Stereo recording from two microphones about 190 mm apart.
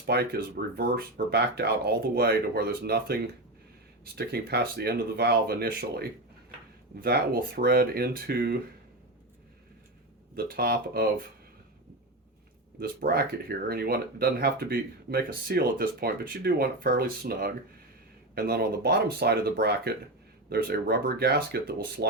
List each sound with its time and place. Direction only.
0.0 s speech: 60° right (ahead or behind)
10.3 s speech: 55° right (ahead or behind)
12.8 s speech: 50° right (ahead or behind)